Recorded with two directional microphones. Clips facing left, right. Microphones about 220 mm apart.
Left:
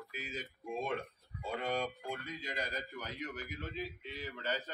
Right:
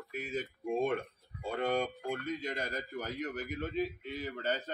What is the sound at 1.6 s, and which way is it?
Speech, 50° right (ahead or behind).